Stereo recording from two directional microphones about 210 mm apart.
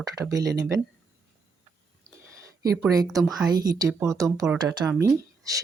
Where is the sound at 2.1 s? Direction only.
5° left (ahead or behind).